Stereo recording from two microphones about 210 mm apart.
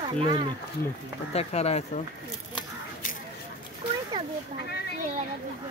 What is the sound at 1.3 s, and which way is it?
Speech, 30° left (ahead or behind).